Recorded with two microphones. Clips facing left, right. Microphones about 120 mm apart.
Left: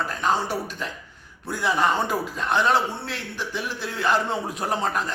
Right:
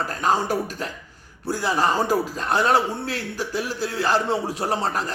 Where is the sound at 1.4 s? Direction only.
35° right (ahead or behind).